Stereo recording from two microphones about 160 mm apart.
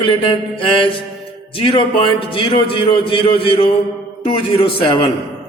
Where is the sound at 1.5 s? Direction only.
35° left (ahead or behind).